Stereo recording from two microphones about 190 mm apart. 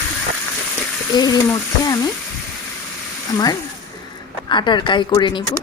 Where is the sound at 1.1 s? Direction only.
20° left (ahead or behind).